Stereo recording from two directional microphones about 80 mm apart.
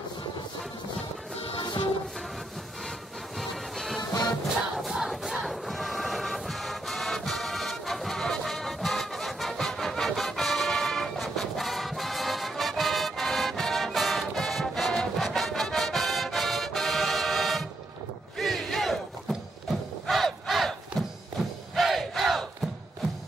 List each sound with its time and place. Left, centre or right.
3.3 s music: centre
4.0 s music: left
4.7 s crowd: centre
20.1 s battle cry: centre
21.0 s music: centre
21.7 s battle cry: centre